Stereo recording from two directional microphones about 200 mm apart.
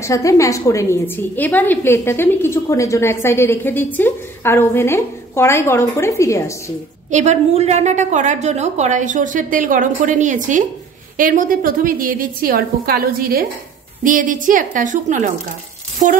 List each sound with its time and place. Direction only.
0.0 s a woman's voice: 15° left (ahead or behind)
7.1 s a woman's voice: 35° right (ahead or behind)